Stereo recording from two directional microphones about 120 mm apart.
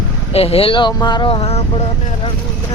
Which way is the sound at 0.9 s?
35° left (ahead or behind).